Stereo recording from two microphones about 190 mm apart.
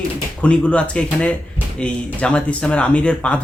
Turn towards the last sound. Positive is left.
turn(degrees=5)  # may be behind; listen again after turning